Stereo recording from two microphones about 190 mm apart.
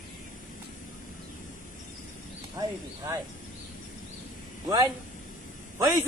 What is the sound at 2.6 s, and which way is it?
Speech, 20° right (ahead or behind).